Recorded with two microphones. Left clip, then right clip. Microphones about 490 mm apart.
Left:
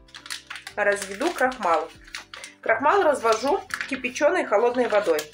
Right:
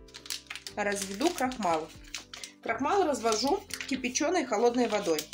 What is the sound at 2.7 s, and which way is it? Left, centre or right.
A woman's voice, right.